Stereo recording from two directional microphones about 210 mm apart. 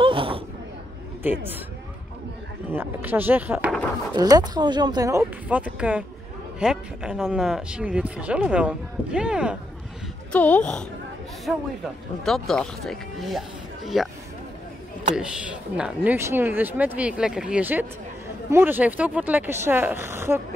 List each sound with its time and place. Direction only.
0.0 s a sound: 25° right (ahead or behind)
1.2 s speech: 10° right (ahead or behind)
2.7 s speech: 10° right (ahead or behind)
4.1 s speech: 20° right (ahead or behind)
10.3 s speech: 5° left (ahead or behind)
15.1 s speech: 5° right (ahead or behind)